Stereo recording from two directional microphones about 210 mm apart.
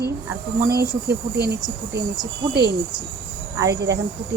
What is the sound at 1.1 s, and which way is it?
Speech, 50° right (ahead or behind).